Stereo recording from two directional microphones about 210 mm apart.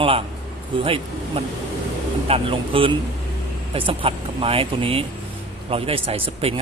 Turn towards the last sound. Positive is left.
turn(degrees=-25)  # may be behind; listen again after turning